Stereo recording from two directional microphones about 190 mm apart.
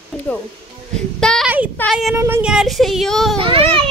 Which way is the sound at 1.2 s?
5° left (ahead or behind).